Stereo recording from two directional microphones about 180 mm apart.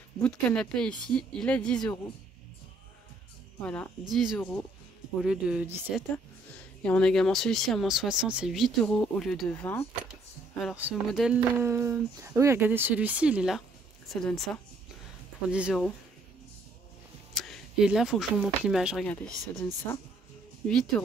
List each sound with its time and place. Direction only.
0.2 s speech: 5° left (ahead or behind)
4.4 s speech: 10° left (ahead or behind)
5.2 s speech: 5° right (ahead or behind)
6.8 s speech: 5° left (ahead or behind)
10.6 s speech: 5° right (ahead or behind)
11.5 s speech: 15° right (ahead or behind)
17.3 s speech: centre (ahead or behind)
19.9 s speech: 20° left (ahead or behind)
20.6 s speech: 5° left (ahead or behind)